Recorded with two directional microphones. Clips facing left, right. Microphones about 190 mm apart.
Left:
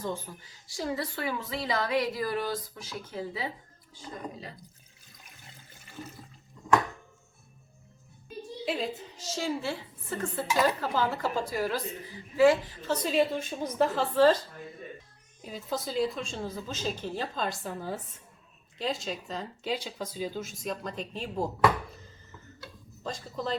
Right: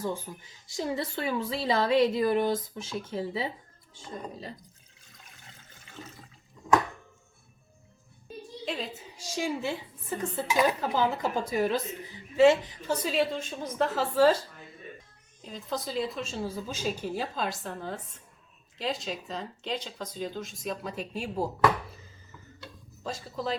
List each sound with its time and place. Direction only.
0.0 s a woman's voice: 10° right (ahead or behind); by 4.5 s 30° right (ahead or behind)
8.6 s a woman's voice: 5° left (ahead or behind)
9.0 s a woman's voice: 10° right (ahead or behind)
13.1 s speech: 10° left (ahead or behind)
15.4 s speech: 10° left (ahead or behind); by 21.5 s 10° right (ahead or behind)
23.0 s speech: 5° right (ahead or behind)